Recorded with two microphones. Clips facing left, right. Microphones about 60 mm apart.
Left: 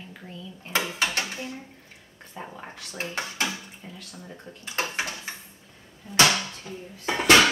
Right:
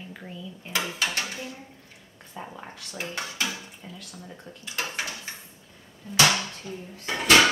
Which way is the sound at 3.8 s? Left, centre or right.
Centre.